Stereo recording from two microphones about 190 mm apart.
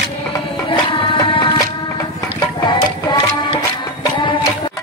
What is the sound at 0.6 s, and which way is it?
Music, 30° left (ahead or behind).